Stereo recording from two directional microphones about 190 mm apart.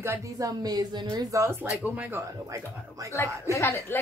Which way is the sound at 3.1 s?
15° left (ahead or behind).